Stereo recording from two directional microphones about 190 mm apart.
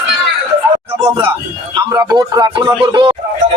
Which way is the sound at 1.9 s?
20° right (ahead or behind).